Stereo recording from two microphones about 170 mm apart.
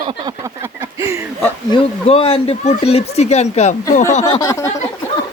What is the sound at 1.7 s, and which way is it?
Speech, 30° left (ahead or behind).